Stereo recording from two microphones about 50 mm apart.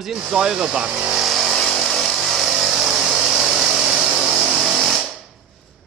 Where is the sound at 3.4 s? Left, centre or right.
Centre.